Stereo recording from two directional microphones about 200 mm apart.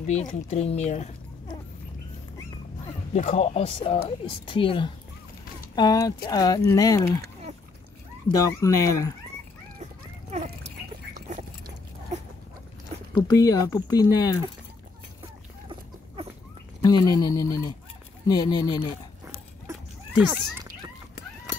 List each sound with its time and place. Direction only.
0.0 s speech: 35° left (ahead or behind)
3.1 s speech: 35° left (ahead or behind); by 7.2 s 15° left (ahead or behind)
8.3 s speech: 15° left (ahead or behind)
10.3 s a sound: 35° right (ahead or behind)
13.1 s speech: 15° left (ahead or behind)
16.8 s speech: 15° left (ahead or behind)
19.7 s a sound: 10° right (ahead or behind)